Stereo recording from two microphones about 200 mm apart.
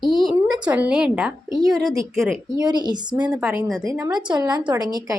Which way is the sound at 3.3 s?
5° right (ahead or behind).